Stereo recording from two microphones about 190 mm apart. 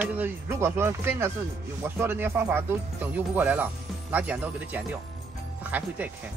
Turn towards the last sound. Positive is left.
turn(degrees=-10)  # may be behind; listen again after turning